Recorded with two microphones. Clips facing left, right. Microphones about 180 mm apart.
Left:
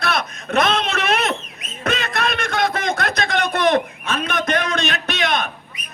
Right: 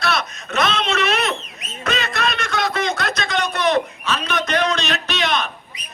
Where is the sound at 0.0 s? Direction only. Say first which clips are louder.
Even; 55° left (ahead or behind).